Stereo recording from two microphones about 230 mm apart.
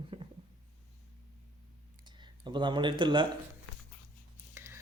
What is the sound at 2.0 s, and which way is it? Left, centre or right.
Speech, centre.